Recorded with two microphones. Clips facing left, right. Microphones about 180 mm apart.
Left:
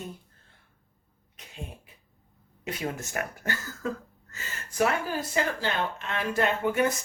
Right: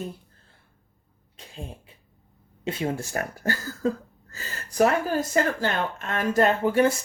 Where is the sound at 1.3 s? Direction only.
30° right (ahead or behind).